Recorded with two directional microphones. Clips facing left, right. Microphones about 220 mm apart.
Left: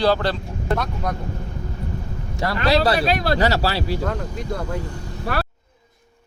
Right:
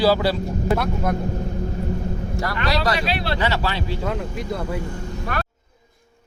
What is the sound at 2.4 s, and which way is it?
Speech, 30° left (ahead or behind).